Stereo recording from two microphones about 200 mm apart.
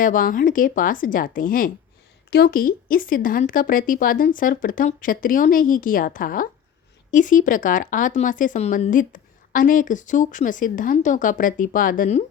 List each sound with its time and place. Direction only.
0.0 s speech: 40° left (ahead or behind)